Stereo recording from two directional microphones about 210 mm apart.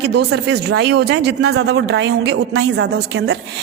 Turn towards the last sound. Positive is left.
turn(degrees=-60)  # may be behind; listen again after turning